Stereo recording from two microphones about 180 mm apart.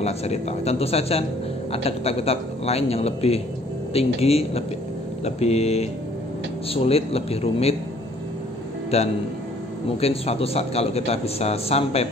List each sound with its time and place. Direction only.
0.0 s a man's voice: 35° left (ahead or behind)
8.9 s a man's voice: 35° left (ahead or behind)